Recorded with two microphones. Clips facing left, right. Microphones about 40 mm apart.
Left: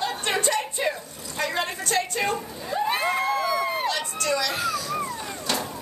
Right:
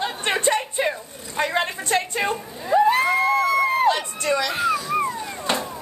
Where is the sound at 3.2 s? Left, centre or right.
Right.